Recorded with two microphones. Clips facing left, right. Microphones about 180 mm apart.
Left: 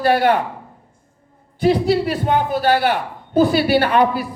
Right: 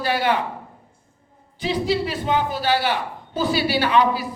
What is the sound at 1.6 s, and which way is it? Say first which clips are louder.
A man's voice: left 6 dB; 55° left (ahead or behind).